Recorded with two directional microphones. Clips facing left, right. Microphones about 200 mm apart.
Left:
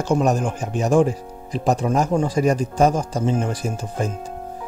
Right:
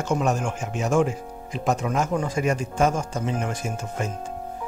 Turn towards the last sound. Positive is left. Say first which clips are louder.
# left 4 dB
turn(degrees=35)  # may be behind; listen again after turning